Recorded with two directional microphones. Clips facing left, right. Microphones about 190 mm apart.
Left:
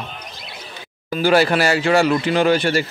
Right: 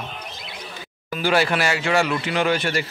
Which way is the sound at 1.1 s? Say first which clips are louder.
Left 5 dB; 40° left (ahead or behind).